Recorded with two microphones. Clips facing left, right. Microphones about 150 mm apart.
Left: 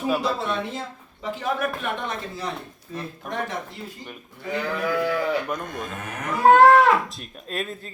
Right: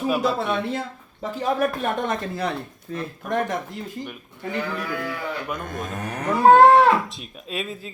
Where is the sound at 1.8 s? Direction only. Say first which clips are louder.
Right 4 dB; 45° right (ahead or behind).